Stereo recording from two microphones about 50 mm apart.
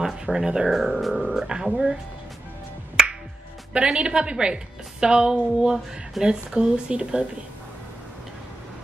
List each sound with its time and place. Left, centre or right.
0.0 s speech: centre
3.0 s music: centre
3.7 s a woman's voice: centre